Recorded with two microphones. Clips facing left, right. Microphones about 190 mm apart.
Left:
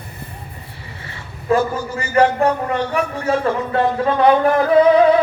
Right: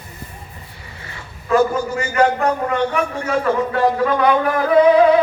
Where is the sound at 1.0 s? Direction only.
30° left (ahead or behind).